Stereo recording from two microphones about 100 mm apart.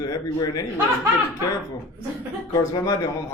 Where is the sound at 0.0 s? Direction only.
40° left (ahead or behind).